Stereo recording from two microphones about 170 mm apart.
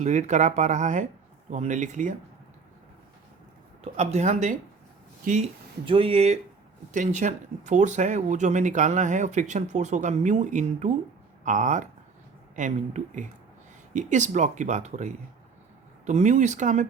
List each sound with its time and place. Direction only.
0.0 s speech: 45° right (ahead or behind)
3.9 s speech: 40° right (ahead or behind)
5.8 s speech: 30° right (ahead or behind)